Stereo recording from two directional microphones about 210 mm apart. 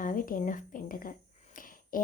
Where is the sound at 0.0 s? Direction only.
40° left (ahead or behind).